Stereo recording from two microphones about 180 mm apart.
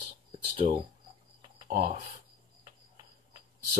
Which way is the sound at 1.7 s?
40° right (ahead or behind).